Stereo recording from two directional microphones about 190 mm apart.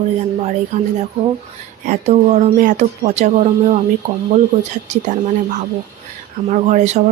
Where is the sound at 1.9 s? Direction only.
40° right (ahead or behind).